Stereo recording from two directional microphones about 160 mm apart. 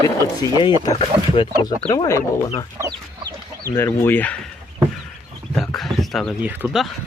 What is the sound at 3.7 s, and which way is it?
Speech, 15° left (ahead or behind).